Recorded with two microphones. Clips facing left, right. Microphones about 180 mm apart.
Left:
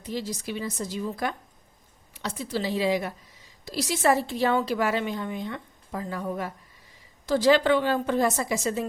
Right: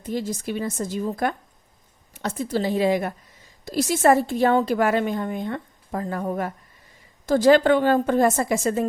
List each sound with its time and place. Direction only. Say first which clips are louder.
0.0 s a woman's voice: right 5 dB; 50° right (ahead or behind)